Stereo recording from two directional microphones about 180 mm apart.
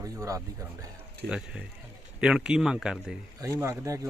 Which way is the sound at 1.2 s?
5° right (ahead or behind).